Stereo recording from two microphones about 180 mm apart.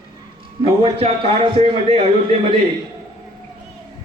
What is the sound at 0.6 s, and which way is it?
A man's voice, 30° right (ahead or behind).